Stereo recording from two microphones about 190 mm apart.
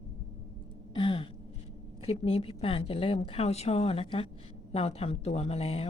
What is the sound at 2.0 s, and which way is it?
Speech, 30° left (ahead or behind).